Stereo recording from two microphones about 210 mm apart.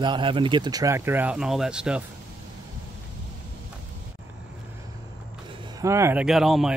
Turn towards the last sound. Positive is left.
turn(degrees=0)  # may be behind; listen again after turning